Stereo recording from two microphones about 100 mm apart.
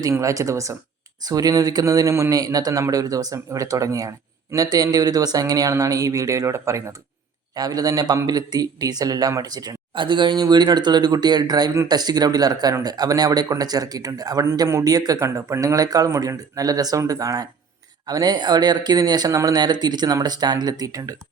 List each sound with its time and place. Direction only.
0.0 s speech: 30° right (ahead or behind)
9.9 s speech: 55° right (ahead or behind); by 21.2 s 35° right (ahead or behind)